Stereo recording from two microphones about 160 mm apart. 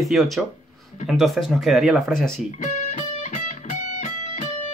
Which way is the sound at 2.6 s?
50° left (ahead or behind).